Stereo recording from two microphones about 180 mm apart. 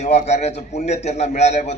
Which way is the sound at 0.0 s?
40° left (ahead or behind).